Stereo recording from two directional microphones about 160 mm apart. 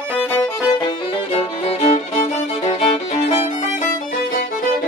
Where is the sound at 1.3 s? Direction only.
40° left (ahead or behind).